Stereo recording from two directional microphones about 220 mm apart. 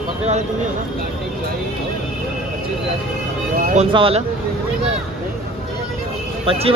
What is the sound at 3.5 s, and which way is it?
Music, 40° right (ahead or behind).